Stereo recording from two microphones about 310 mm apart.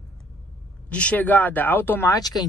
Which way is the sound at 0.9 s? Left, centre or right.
Centre.